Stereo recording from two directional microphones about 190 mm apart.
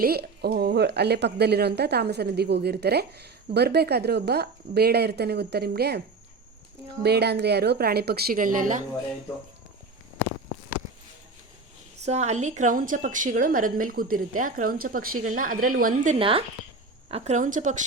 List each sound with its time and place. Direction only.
0.0 s speech: 55° right (ahead or behind)
7.0 s speech: 60° right (ahead or behind); by 8.8 s 45° right (ahead or behind)
12.0 s a woman's voice: 35° right (ahead or behind)
16.1 s a woman's voice: 30° right (ahead or behind)